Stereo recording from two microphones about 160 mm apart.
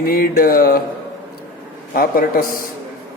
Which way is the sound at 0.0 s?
65° left (ahead or behind).